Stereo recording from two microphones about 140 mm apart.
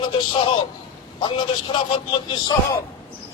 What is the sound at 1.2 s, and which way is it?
Speech, 35° left (ahead or behind).